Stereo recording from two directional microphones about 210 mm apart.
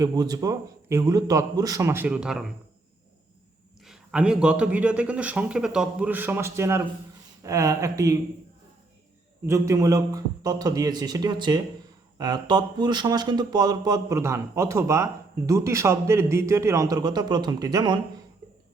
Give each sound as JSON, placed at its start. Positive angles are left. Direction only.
{"t": 0.0, "sound": "speech", "side_deg": -15}
{"t": 3.8, "sound": "a man's voice", "side_deg": -5}
{"t": 9.5, "sound": "speech", "side_deg": -15}